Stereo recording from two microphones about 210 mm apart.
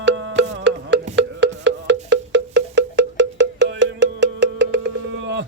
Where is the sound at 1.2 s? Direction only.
60° right (ahead or behind).